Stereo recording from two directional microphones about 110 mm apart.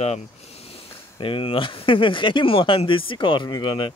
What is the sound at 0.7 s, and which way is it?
Speech, 50° left (ahead or behind).